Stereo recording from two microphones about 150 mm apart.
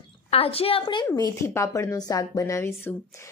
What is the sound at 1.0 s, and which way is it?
A woman's voice, 20° left (ahead or behind).